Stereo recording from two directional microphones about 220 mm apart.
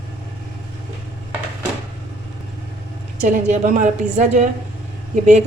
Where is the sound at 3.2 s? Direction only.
35° right (ahead or behind).